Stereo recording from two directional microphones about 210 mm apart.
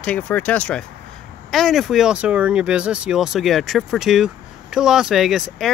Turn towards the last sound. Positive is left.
turn(degrees=0)  # may be behind; listen again after turning